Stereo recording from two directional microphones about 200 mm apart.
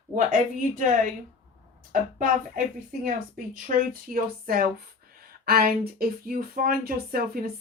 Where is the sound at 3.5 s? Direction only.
45° right (ahead or behind).